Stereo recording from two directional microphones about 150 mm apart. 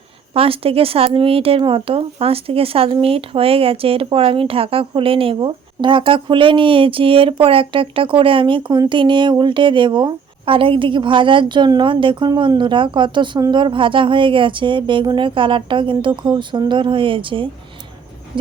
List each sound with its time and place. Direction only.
0.3 s speech: 40° right (ahead or behind)